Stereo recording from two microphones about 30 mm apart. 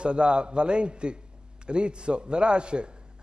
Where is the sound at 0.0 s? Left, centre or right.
Right.